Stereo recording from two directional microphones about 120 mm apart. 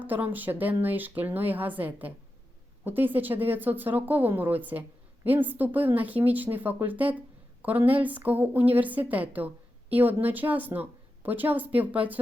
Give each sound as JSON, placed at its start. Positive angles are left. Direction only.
{"t": 0.0, "sound": "a woman's voice", "side_deg": -15}